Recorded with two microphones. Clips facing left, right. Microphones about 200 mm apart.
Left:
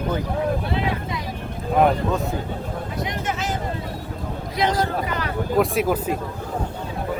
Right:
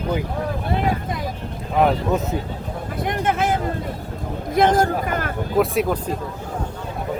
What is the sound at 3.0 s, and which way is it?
Speech, 55° right (ahead or behind).